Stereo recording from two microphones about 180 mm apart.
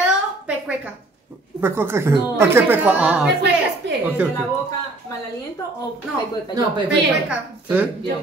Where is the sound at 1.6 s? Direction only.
15° right (ahead or behind).